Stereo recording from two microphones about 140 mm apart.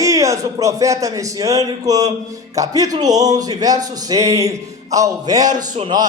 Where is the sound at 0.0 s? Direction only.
25° right (ahead or behind).